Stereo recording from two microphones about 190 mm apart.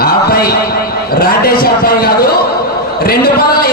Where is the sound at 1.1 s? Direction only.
55° left (ahead or behind).